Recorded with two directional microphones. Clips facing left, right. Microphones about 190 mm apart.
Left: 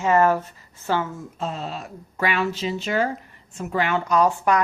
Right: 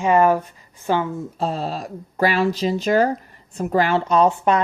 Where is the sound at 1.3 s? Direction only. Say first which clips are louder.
Right 4 dB; 35° right (ahead or behind).